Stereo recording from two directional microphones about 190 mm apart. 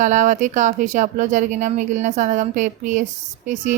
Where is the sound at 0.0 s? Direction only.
40° right (ahead or behind).